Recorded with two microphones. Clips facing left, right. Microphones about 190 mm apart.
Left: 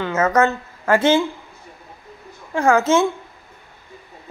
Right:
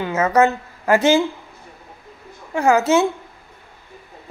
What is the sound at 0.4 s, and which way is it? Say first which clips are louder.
Speech: right 2 dB; 15° right (ahead or behind).